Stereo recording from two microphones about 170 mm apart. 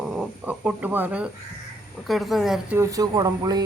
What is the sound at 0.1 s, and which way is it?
Speech, 5° right (ahead or behind).